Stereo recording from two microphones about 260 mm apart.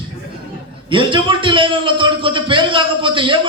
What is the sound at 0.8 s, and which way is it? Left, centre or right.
A man's voice, centre.